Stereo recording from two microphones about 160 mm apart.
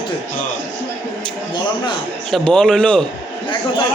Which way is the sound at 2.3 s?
5° left (ahead or behind).